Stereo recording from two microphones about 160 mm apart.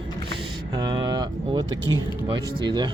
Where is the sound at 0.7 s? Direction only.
25° right (ahead or behind).